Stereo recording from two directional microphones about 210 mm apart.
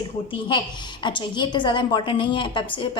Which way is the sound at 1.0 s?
20° left (ahead or behind).